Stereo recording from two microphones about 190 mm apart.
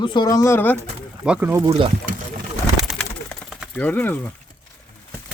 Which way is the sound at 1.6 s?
25° right (ahead or behind).